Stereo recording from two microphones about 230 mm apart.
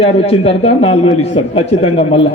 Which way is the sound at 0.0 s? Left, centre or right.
Left.